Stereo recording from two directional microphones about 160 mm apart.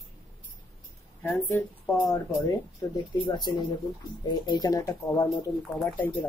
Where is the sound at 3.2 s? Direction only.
25° left (ahead or behind).